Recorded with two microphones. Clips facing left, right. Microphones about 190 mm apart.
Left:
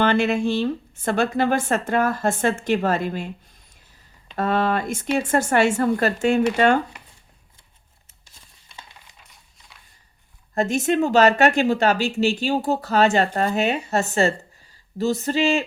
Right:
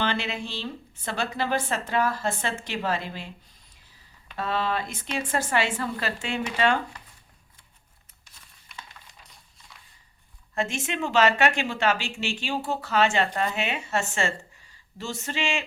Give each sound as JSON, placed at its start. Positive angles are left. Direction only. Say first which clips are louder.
{"t": 0.0, "sound": "speech", "louder": "left 10 dB", "side_deg": 50}
{"t": 4.4, "sound": "speech", "louder": "left 6 dB", "side_deg": 50}
{"t": 10.5, "sound": "speech", "louder": "left 9 dB", "side_deg": 40}